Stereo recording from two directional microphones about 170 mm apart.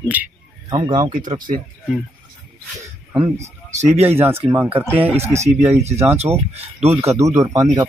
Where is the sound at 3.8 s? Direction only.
40° right (ahead or behind).